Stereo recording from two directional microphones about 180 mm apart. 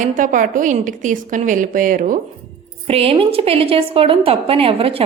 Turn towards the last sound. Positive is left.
turn(degrees=-30)  # may be behind; listen again after turning